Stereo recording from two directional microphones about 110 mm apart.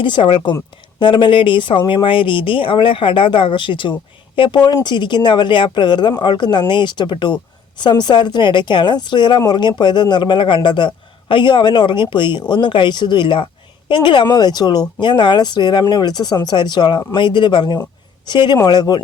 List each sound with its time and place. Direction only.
0.0 s a man's voice: 45° left (ahead or behind)